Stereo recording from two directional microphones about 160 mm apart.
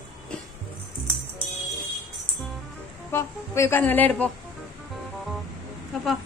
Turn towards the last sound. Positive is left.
turn(degrees=0)  # may be behind; listen again after turning